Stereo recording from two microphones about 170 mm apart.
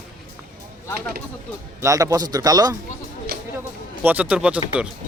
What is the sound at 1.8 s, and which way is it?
Speech, 20° right (ahead or behind).